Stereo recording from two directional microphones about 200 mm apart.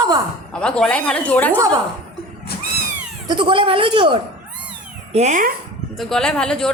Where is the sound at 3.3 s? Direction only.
25° right (ahead or behind).